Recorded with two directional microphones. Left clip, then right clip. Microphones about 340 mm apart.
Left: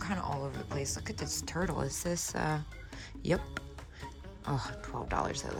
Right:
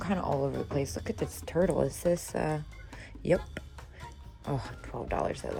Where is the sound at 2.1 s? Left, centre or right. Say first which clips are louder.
Right 5 dB; left.